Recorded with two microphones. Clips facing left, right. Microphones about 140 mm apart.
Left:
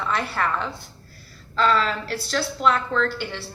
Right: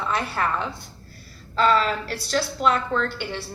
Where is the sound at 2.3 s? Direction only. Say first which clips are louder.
Even; 10° right (ahead or behind).